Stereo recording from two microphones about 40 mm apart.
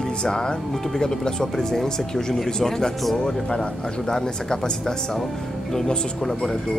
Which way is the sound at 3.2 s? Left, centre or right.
Centre.